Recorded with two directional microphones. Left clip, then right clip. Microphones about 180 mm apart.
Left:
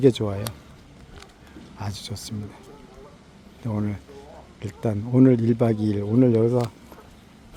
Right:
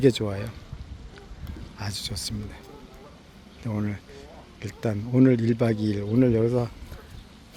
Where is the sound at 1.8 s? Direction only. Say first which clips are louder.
Right 2 dB; 15° left (ahead or behind).